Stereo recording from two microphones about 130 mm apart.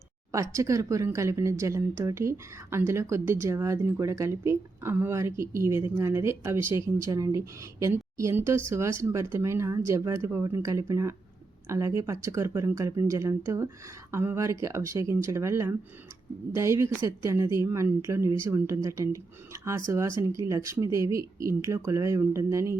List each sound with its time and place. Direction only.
0.3 s speech: 20° right (ahead or behind)